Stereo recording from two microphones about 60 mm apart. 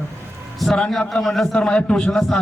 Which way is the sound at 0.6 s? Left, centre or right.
Centre.